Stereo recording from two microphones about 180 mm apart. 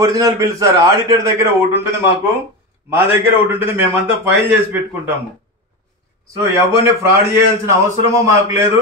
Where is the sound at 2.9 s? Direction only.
10° right (ahead or behind).